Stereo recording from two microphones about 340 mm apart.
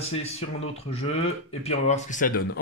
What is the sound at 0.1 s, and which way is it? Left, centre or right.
Speech, centre.